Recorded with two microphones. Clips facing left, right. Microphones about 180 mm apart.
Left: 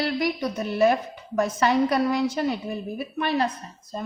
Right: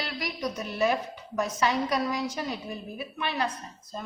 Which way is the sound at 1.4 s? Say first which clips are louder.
Left 6 dB; 55° left (ahead or behind).